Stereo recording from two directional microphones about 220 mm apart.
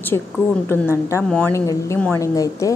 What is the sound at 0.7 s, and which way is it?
A woman's voice, 10° left (ahead or behind).